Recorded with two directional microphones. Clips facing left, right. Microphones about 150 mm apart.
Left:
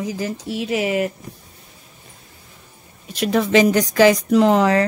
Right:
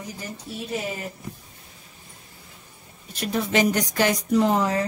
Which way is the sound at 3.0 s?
90° left.